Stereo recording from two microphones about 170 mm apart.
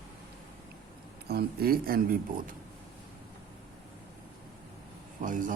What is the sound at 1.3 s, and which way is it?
Speech, 65° right (ahead or behind).